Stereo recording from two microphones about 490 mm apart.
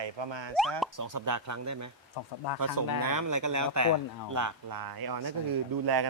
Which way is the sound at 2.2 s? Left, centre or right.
Left.